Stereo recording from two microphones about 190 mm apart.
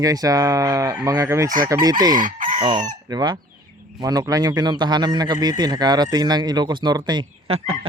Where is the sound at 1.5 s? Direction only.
45° right (ahead or behind).